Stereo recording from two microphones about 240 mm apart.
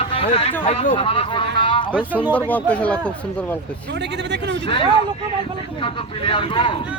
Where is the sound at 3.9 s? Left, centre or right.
Right.